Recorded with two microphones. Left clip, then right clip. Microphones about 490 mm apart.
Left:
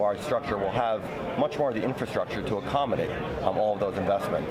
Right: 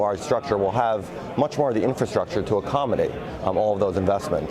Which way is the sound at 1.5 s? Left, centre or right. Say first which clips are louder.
Right 5 dB; right.